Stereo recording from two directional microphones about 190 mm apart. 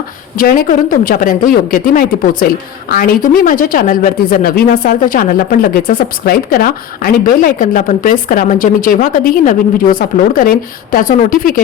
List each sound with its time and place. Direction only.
0.3 s speech: 50° left (ahead or behind)